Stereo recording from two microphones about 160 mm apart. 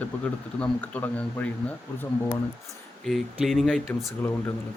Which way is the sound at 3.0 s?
Centre (ahead or behind).